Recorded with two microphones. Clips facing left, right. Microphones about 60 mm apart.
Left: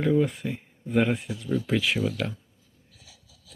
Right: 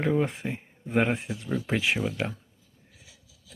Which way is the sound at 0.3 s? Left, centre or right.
Right.